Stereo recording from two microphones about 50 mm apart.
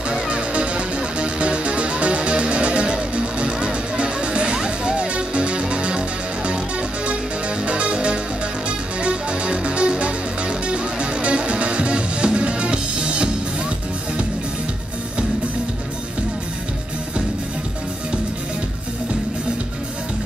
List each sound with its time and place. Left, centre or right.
0.1 s music: right
7.6 s music: right